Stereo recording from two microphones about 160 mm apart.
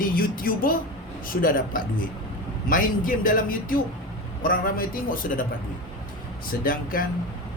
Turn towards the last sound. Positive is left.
turn(degrees=60)  # may be behind; listen again after turning